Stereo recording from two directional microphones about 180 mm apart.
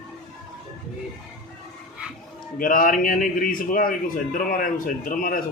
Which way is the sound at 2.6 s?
50° left (ahead or behind).